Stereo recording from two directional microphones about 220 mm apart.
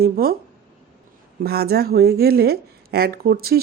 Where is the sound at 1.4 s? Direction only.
45° right (ahead or behind).